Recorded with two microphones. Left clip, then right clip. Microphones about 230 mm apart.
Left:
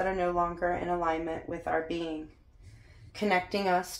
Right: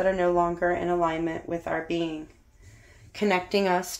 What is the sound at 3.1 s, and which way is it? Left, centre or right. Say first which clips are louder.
Speech: right 4 dB; right.